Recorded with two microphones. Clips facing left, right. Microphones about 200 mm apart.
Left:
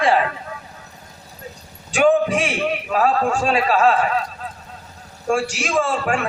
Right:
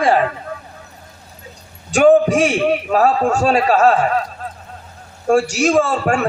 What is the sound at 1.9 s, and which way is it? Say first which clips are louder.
A man's voice: right 5 dB; 45° right (ahead or behind).